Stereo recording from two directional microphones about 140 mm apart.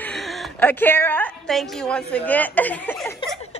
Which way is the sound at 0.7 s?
15° left (ahead or behind).